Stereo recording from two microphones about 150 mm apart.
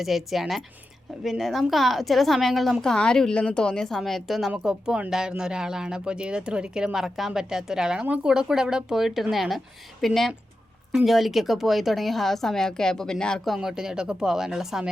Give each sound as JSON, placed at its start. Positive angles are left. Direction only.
{"t": 0.0, "sound": "a woman's voice", "side_deg": 0}